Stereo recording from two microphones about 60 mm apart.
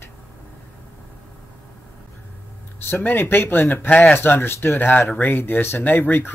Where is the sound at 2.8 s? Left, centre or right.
Left.